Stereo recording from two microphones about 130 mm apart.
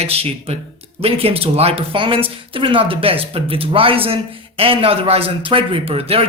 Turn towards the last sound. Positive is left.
turn(degrees=-50)  # may be behind; listen again after turning